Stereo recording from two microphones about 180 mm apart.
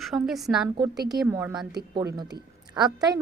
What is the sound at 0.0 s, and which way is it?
Speech, centre (ahead or behind).